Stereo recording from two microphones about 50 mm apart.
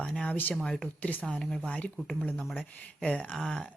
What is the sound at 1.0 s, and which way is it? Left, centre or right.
Speech, left.